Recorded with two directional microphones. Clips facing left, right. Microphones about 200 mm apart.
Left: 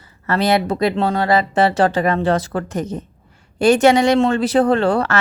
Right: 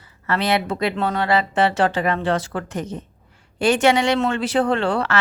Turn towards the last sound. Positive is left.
turn(degrees=40)  # may be behind; listen again after turning